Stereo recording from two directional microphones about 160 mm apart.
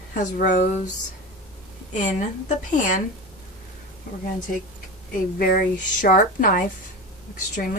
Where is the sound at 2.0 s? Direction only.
50° left (ahead or behind).